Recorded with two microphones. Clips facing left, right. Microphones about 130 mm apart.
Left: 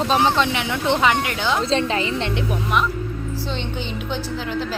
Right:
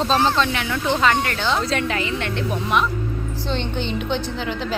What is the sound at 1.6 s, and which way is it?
Speech, 25° left (ahead or behind).